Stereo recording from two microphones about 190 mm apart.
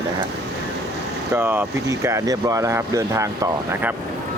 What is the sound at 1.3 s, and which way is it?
Speech, 10° right (ahead or behind).